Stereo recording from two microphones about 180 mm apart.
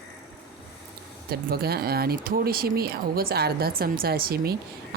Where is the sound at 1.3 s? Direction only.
60° right (ahead or behind).